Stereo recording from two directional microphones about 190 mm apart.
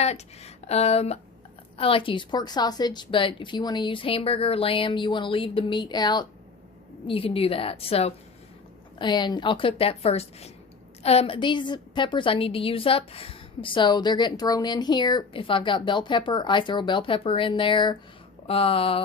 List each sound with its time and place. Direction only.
0.0 s a woman's voice: 35° left (ahead or behind)